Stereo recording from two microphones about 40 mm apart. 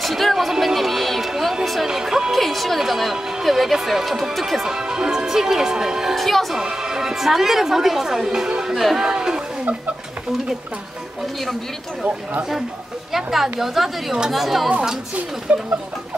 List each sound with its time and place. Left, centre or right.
0.0 s music: centre
2.3 s a woman's voice: centre
4.6 s a woman's voice: centre
6.1 s a woman's voice: centre
6.6 s a woman's voice: centre
13.1 s a woman's voice: centre
15.5 s a sound: right